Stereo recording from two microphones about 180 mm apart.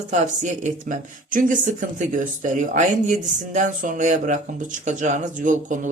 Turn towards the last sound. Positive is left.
turn(degrees=-45)  # may be behind; listen again after turning